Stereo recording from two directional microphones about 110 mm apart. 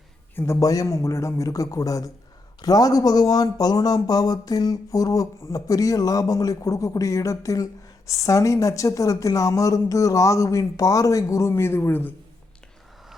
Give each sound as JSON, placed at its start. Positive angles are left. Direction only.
{"t": 0.3, "sound": "speech", "side_deg": 25}